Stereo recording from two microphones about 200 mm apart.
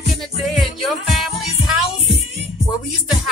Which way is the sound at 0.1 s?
Centre (ahead or behind).